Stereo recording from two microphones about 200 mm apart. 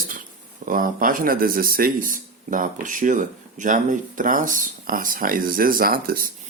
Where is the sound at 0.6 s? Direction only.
45° right (ahead or behind).